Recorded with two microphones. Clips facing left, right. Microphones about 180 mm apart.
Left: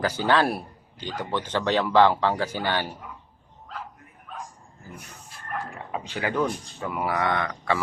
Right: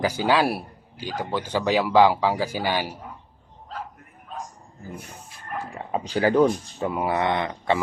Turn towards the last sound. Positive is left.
turn(degrees=-20)  # may be behind; listen again after turning